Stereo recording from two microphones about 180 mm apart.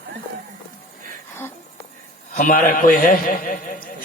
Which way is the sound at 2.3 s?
50° left (ahead or behind).